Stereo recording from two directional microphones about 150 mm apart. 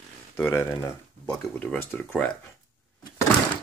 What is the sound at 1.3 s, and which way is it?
Speech, 10° left (ahead or behind).